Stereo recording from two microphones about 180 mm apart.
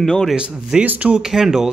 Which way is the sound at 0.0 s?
Centre (ahead or behind).